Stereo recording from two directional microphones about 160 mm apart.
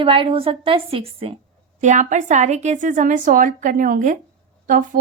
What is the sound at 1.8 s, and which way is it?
A woman's voice, 50° right (ahead or behind).